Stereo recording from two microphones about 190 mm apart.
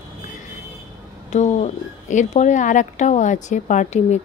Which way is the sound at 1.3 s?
40° left (ahead or behind).